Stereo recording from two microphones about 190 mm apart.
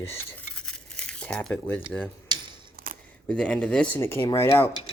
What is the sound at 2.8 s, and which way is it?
Camera, 50° right (ahead or behind).